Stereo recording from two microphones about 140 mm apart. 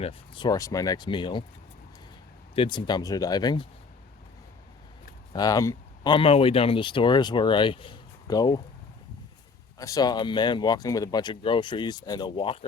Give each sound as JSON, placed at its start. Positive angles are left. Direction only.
{"t": 0.0, "sound": "speech", "side_deg": 40}
{"t": 0.5, "sound": "speech", "side_deg": 25}
{"t": 2.6, "sound": "speech", "side_deg": 35}
{"t": 5.3, "sound": "speech", "side_deg": 25}
{"t": 9.7, "sound": "speech", "side_deg": 25}